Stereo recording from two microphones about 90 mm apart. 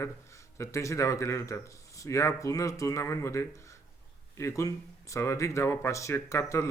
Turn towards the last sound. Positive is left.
turn(degrees=30)  # may be behind; listen again after turning